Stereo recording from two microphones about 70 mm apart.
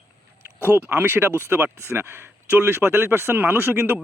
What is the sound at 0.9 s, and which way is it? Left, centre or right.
Speech, right.